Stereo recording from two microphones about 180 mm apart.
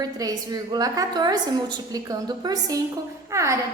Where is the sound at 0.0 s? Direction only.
20° right (ahead or behind).